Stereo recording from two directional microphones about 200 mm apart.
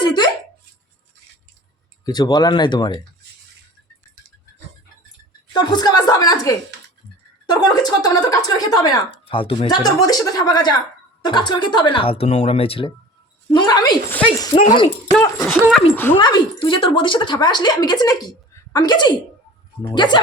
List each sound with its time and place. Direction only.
0.0 s a sound: 25° left (ahead or behind)
2.0 s a woman's voice: 20° left (ahead or behind)
5.5 s a woman's voice: 20° left (ahead or behind)
14.1 s speech: 10° left (ahead or behind)
14.5 s speech: 35° left (ahead or behind)
15.2 s speech: 10° left (ahead or behind)
15.5 s speech: 5° right (ahead or behind)
16.1 s a woman's voice: 25° left (ahead or behind)